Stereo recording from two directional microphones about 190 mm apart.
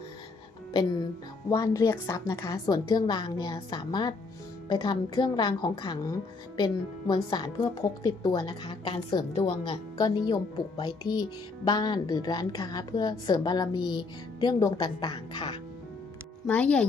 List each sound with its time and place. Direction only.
1.5 s a woman's voice: 15° left (ahead or behind)
16.5 s a child's voice: 5° left (ahead or behind)